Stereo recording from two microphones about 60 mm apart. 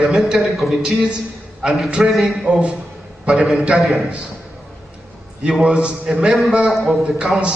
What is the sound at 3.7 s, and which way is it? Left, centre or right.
Speech, centre.